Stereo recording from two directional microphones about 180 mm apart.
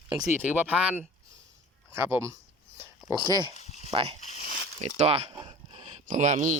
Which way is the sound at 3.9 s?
30° right (ahead or behind).